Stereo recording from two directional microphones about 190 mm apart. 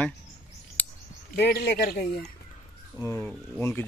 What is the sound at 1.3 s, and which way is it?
Speech, 50° left (ahead or behind).